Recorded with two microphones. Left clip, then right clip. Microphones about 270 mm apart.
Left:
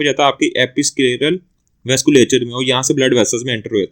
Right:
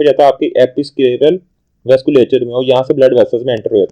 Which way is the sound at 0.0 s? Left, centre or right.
Left.